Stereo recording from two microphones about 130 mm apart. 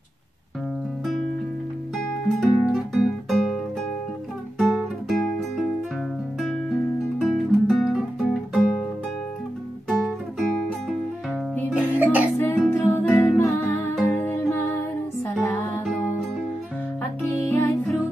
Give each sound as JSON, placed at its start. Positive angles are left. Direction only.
{"t": 2.2, "sound": "music", "side_deg": 0}
{"t": 7.2, "sound": "music", "side_deg": 0}
{"t": 9.8, "sound": "music", "side_deg": 0}
{"t": 11.7, "sound": "music", "side_deg": -10}
{"t": 12.4, "sound": "music", "side_deg": 15}
{"t": 17.5, "sound": "music", "side_deg": 20}